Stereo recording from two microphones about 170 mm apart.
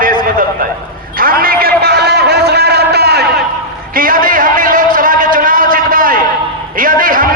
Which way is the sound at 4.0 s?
55° right (ahead or behind).